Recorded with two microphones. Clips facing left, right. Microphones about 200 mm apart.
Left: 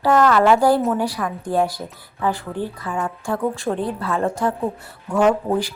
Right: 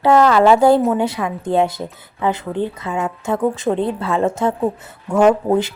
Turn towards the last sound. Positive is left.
turn(degrees=-20)  # may be behind; listen again after turning